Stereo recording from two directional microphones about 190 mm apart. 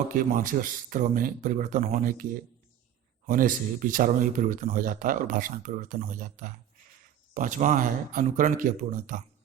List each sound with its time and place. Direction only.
0.1 s speech: 45° right (ahead or behind)
3.2 s speech: 45° right (ahead or behind)